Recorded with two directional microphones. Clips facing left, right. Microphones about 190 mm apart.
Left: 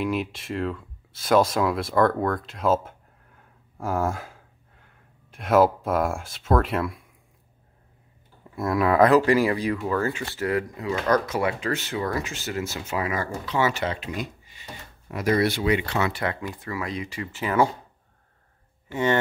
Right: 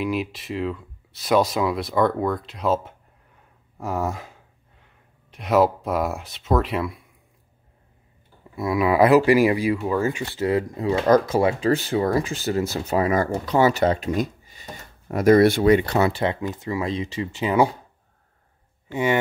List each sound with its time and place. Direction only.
0.0 s speech: centre (ahead or behind)
8.5 s speech: centre (ahead or behind); by 16.1 s 45° right (ahead or behind)
16.1 s speech: 25° right (ahead or behind)
18.9 s speech: 15° right (ahead or behind)